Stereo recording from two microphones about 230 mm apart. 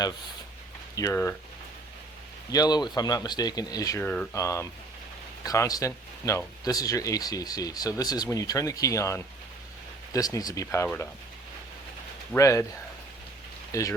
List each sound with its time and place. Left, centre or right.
0.9 s speech: centre
2.5 s speech: centre
12.3 s speech: centre
13.7 s speech: centre